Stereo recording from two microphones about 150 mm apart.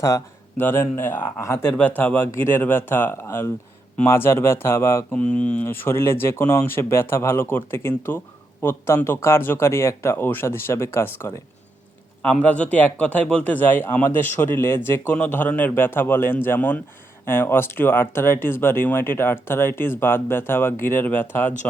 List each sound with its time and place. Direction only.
0.6 s speech: 15° left (ahead or behind)